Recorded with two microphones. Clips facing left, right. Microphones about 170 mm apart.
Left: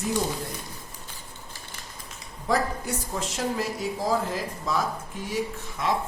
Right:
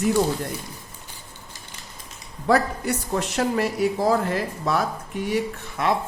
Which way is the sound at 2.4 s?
65° right (ahead or behind).